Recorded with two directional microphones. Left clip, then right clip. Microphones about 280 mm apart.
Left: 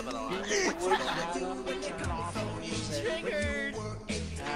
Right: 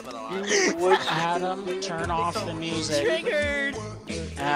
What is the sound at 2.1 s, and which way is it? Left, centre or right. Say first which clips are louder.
Speech: right 10 dB; right.